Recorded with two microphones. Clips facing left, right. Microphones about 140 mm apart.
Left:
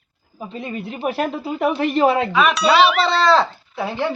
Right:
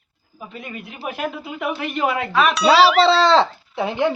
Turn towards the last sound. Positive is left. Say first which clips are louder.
# right 2 dB
turn(degrees=-20)  # may be behind; listen again after turning